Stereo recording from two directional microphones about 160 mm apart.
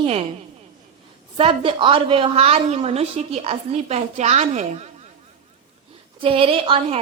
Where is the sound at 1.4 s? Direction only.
35° right (ahead or behind).